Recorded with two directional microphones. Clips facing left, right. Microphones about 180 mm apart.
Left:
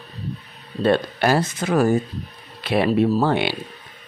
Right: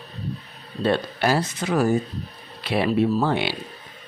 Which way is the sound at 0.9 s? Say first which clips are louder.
Left 3 dB; 50° left (ahead or behind).